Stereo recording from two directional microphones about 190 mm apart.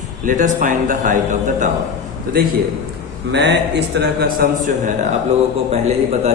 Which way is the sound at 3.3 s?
65° right (ahead or behind).